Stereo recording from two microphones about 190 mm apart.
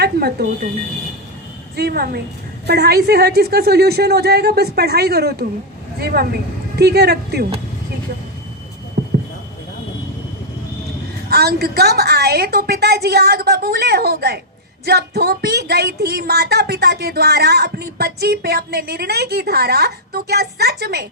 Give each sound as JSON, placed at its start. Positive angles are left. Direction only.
{"t": 0.0, "sound": "speech", "side_deg": -55}
{"t": 1.7, "sound": "speech", "side_deg": -55}
{"t": 9.0, "sound": "a sound", "side_deg": -55}
{"t": 11.3, "sound": "speech", "side_deg": -55}